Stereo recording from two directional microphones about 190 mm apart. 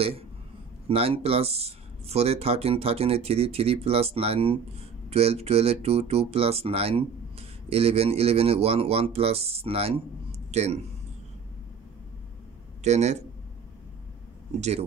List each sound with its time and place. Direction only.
0.8 s speech: 30° right (ahead or behind)
12.8 s speech: 35° right (ahead or behind)
14.6 s speech: 35° right (ahead or behind)